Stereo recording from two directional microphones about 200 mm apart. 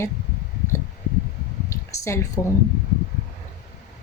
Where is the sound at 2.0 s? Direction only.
15° left (ahead or behind).